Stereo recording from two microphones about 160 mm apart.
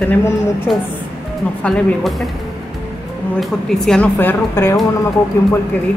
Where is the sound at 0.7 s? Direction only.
Centre (ahead or behind).